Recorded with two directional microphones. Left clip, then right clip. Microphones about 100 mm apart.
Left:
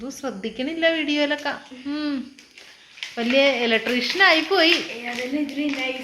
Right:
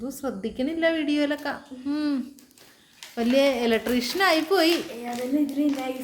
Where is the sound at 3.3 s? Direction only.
30° right (ahead or behind).